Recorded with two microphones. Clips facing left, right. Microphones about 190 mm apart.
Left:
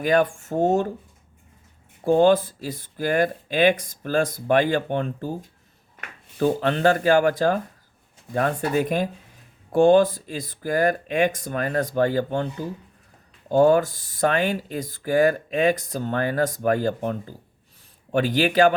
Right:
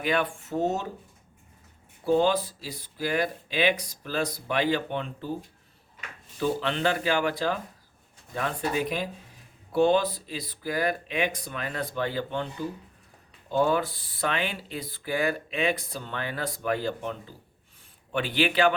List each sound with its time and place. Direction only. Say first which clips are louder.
0.0 s speech: left 7 dB; 45° left (ahead or behind)
2.0 s speech: left 6 dB; 50° left (ahead or behind)
13.5 s speech: left 8 dB; 45° left (ahead or behind)